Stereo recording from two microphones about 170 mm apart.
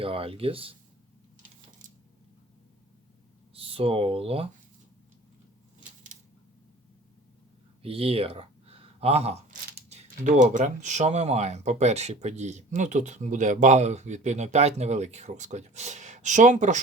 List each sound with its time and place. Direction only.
0.0 s speech: 35° right (ahead or behind)
3.5 s speech: 35° right (ahead or behind)
7.8 s speech: 35° right (ahead or behind)